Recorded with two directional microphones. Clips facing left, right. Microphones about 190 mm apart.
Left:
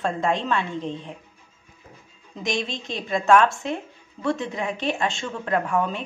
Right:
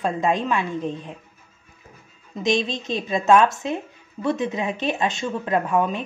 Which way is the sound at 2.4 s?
20° right (ahead or behind).